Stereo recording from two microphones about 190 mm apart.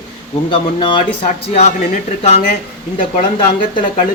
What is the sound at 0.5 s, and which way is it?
Speech, 25° left (ahead or behind).